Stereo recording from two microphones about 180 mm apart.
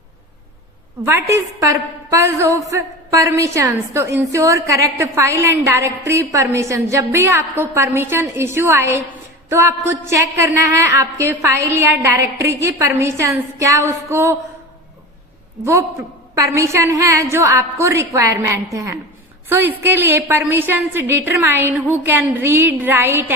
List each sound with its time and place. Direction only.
1.0 s a woman's voice: 15° right (ahead or behind)
16.3 s a woman's voice: 15° right (ahead or behind)